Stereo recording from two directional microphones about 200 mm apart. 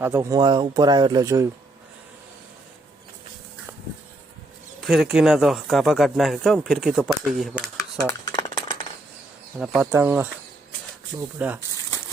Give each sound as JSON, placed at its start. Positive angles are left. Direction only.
{"t": 0.0, "sound": "speech", "side_deg": -15}
{"t": 4.8, "sound": "speech", "side_deg": 0}
{"t": 7.8, "sound": "a sound", "side_deg": 15}
{"t": 9.6, "sound": "speech", "side_deg": -5}
{"t": 11.3, "sound": "speech", "side_deg": -10}